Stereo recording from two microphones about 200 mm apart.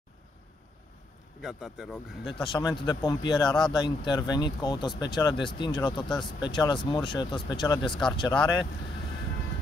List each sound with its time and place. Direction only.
1.4 s speech: 5° right (ahead or behind)
2.3 s speech: 25° left (ahead or behind)